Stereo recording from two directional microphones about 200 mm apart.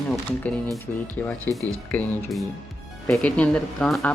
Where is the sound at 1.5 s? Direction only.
10° left (ahead or behind).